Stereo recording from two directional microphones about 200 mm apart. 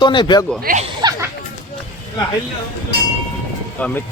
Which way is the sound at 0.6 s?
40° right (ahead or behind).